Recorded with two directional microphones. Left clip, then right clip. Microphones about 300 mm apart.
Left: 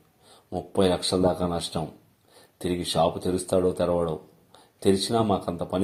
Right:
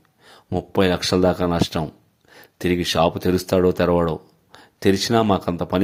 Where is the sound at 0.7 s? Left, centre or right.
Right.